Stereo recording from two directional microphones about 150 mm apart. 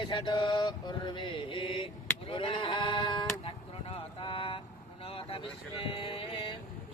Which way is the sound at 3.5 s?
35° left (ahead or behind).